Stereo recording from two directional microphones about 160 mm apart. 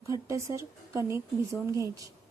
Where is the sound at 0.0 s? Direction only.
20° right (ahead or behind).